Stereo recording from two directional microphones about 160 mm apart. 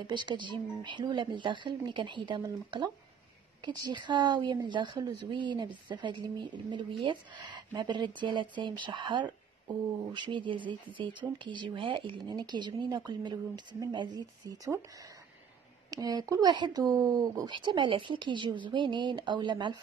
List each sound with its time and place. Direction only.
0.0 s speech: 30° right (ahead or behind)
15.9 s speech: 25° right (ahead or behind)